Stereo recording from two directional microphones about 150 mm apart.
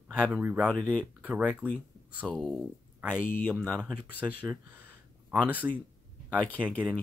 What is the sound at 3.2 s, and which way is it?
Speech, 15° left (ahead or behind).